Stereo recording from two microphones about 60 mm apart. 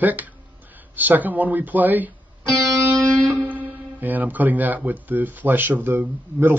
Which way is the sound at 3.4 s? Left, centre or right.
Right.